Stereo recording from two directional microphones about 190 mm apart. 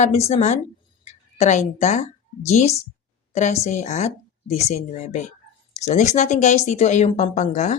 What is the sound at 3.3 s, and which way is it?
A woman's voice, 35° left (ahead or behind).